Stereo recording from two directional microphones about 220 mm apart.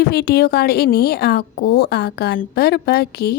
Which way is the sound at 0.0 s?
45° left (ahead or behind).